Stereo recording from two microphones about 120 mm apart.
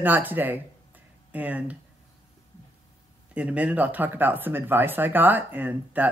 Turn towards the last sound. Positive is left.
turn(degrees=-15)  # may be behind; listen again after turning